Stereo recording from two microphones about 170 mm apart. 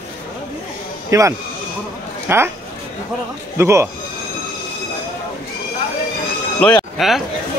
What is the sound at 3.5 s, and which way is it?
Speech, 15° right (ahead or behind).